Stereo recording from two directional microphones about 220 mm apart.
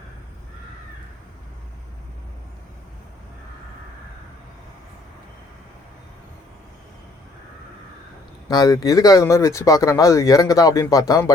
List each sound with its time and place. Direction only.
8.4 s speech: 15° left (ahead or behind)